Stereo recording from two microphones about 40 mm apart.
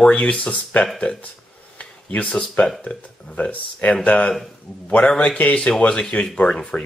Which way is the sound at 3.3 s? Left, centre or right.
Left.